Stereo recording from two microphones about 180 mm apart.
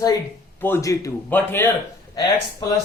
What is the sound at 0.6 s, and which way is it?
A man's voice, 15° left (ahead or behind).